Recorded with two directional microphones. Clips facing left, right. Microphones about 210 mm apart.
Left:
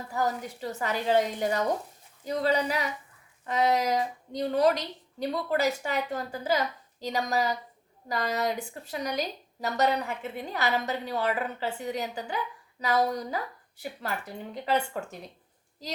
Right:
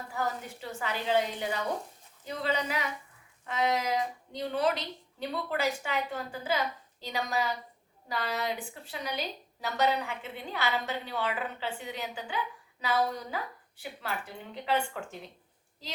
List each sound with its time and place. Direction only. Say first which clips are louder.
0.1 s a woman's voice: left 5 dB; 40° left (ahead or behind)